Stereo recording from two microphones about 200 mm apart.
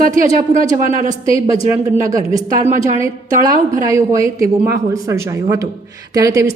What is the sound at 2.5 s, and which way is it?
Speech, 40° right (ahead or behind).